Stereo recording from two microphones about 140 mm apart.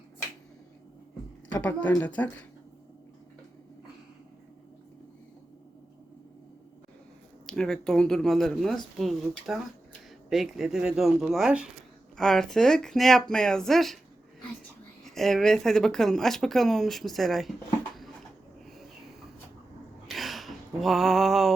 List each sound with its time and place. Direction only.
2.0 s speech: 10° left (ahead or behind)
7.4 s speech: 5° left (ahead or behind)
15.0 s speech: centre (ahead or behind)
20.1 s a sound: centre (ahead or behind)